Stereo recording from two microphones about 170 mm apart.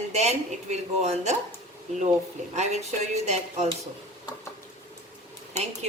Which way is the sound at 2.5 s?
40° right (ahead or behind).